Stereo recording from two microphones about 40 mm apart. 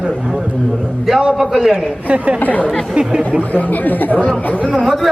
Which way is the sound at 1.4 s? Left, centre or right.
Centre.